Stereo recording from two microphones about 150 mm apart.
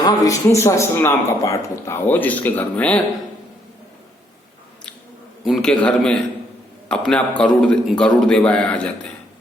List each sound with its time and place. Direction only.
0.0 s speech: 25° left (ahead or behind)
5.5 s a man's voice: 5° left (ahead or behind)